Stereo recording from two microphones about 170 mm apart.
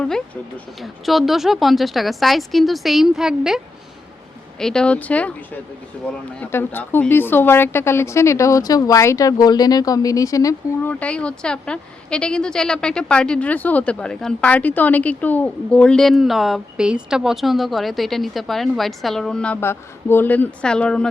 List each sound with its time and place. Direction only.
0.0 s a woman's voice: 5° left (ahead or behind)
4.6 s speech: 5° left (ahead or behind); by 10.9 s 20° left (ahead or behind)
11.0 s a woman's voice: 5° left (ahead or behind)